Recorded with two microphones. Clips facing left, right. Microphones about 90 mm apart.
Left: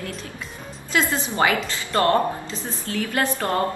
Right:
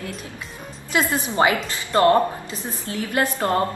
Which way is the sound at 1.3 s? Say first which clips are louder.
Right 2 dB; 25° right (ahead or behind).